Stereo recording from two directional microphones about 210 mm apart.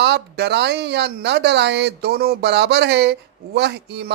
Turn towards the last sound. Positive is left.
turn(degrees=-50)  # may be behind; listen again after turning